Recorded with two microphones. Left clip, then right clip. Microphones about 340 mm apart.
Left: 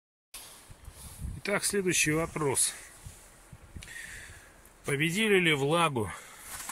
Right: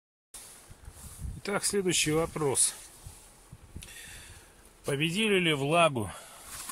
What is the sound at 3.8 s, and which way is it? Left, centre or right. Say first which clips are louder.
Snort: left 4 dB; centre.